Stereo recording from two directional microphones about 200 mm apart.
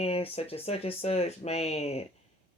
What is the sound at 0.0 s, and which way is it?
Speech, 30° left (ahead or behind).